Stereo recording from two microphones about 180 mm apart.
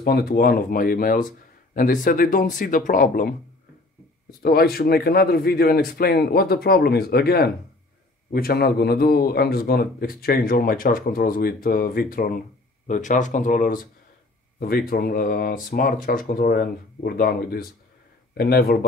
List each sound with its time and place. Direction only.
0.0 s a man's voice: 60° left (ahead or behind)